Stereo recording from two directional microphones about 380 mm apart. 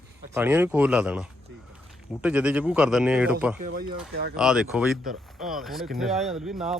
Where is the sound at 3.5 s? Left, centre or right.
Right.